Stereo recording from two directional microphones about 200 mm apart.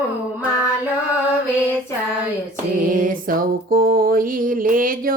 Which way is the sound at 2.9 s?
45° right (ahead or behind).